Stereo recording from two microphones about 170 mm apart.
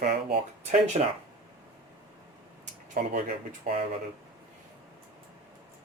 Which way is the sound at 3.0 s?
55° right (ahead or behind).